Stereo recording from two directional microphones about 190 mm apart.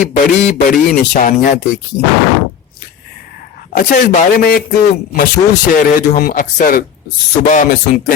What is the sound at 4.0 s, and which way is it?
Speech, 55° left (ahead or behind).